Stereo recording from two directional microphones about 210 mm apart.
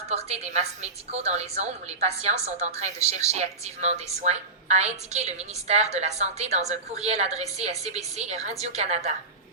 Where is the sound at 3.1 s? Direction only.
30° right (ahead or behind).